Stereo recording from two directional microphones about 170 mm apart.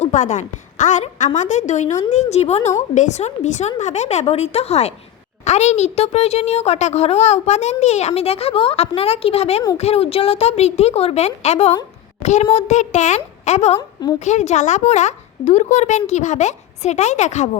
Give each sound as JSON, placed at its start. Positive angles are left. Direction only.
{"t": 0.0, "sound": "a woman's voice", "side_deg": 45}
{"t": 13.7, "sound": "a woman's voice", "side_deg": 25}
{"t": 14.2, "sound": "a woman's voice", "side_deg": 45}